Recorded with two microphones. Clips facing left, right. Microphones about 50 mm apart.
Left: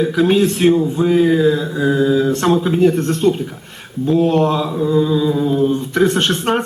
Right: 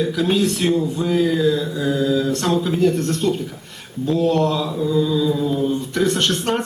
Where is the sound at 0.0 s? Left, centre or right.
Left.